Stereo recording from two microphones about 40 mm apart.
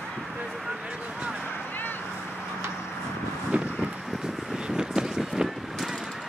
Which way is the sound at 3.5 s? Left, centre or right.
Right.